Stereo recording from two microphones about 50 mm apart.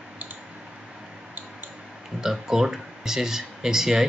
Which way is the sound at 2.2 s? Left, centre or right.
Centre.